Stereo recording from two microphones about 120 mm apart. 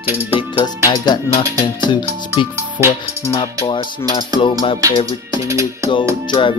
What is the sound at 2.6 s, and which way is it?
Speech, 20° right (ahead or behind).